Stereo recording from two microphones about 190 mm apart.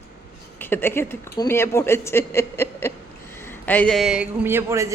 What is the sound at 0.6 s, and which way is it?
A woman's voice, 10° left (ahead or behind).